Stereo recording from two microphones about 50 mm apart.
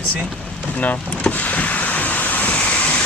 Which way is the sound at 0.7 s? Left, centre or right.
Left.